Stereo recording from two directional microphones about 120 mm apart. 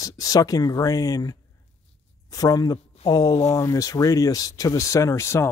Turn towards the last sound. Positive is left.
turn(degrees=20)  # may be behind; listen again after turning